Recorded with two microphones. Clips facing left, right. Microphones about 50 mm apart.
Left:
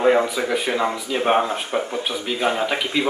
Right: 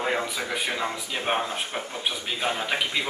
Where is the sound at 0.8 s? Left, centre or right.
Left.